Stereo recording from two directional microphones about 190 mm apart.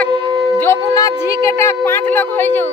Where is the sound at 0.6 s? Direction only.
15° left (ahead or behind).